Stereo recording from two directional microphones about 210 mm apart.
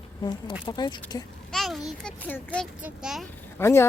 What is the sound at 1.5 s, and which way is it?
A child's voice, centre (ahead or behind).